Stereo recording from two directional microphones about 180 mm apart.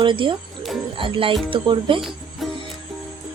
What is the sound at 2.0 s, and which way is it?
Music, centre (ahead or behind).